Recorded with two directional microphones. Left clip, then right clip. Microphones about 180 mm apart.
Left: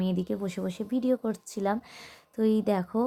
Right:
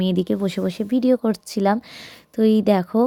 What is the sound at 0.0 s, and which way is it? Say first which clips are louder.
A woman's voice: right 9 dB; 30° right (ahead or behind).